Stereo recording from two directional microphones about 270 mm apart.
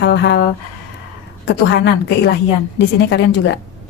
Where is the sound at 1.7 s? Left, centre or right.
Left.